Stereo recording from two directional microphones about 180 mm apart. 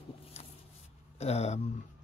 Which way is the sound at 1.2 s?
35° left (ahead or behind).